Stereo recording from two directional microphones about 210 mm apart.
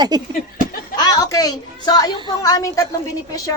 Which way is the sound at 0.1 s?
20° right (ahead or behind).